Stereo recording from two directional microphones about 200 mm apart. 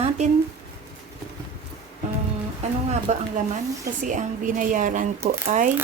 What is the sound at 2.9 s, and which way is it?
Speech, 35° right (ahead or behind).